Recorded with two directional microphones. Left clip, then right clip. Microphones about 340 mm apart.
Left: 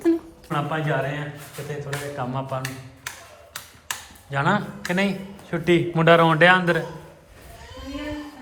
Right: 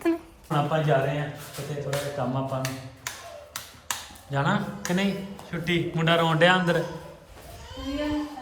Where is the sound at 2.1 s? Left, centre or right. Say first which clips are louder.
Left 1 dB; centre.